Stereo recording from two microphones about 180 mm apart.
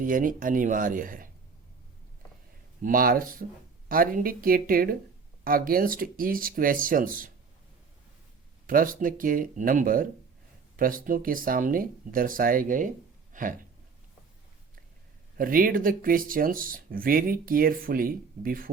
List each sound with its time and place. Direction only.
0.0 s speech: 50° right (ahead or behind)
2.8 s speech: 50° right (ahead or behind)
8.6 s speech: 50° right (ahead or behind)
13.3 s a sound: 50° right (ahead or behind)
15.4 s speech: 50° right (ahead or behind)